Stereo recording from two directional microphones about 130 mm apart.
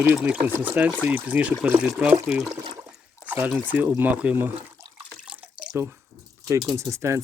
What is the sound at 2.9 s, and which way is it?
Water, 5° right (ahead or behind).